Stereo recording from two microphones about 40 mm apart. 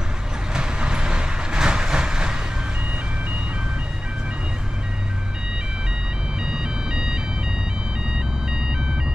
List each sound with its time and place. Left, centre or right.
0.6 s train: right
6.4 s music: centre